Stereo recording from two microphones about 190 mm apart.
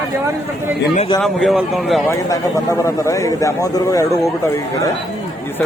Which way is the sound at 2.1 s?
15° left (ahead or behind).